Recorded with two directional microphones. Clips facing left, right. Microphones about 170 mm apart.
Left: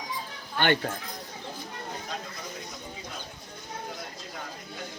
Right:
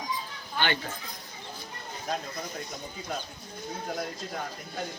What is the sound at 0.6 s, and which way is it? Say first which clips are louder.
Speech: left 5 dB; 55° left (ahead or behind).